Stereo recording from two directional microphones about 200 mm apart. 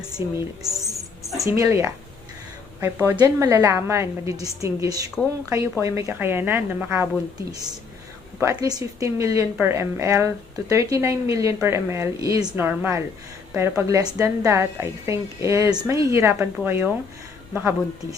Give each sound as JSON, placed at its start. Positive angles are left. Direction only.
{"t": 0.2, "sound": "a woman's voice", "side_deg": -10}
{"t": 1.4, "sound": "a woman's voice", "side_deg": -15}
{"t": 5.2, "sound": "speech", "side_deg": 5}
{"t": 5.8, "sound": "a woman's voice", "side_deg": -15}
{"t": 8.4, "sound": "a woman's voice", "side_deg": -15}